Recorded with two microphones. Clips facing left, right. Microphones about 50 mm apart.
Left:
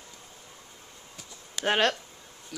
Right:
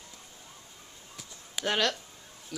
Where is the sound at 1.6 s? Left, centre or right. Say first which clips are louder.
Left 4 dB; left.